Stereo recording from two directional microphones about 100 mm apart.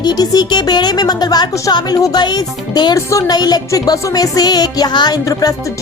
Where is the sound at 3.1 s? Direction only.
35° left (ahead or behind).